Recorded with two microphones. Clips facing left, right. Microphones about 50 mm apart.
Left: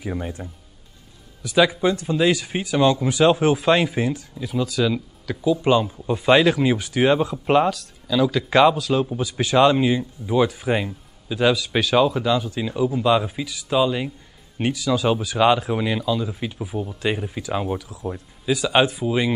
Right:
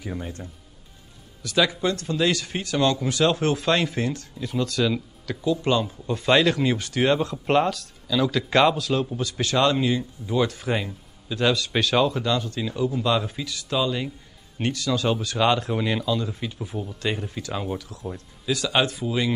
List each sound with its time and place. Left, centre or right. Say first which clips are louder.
0.0 s speech: left 4 dB; centre